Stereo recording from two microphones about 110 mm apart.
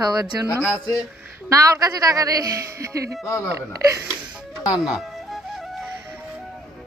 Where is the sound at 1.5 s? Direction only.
30° right (ahead or behind).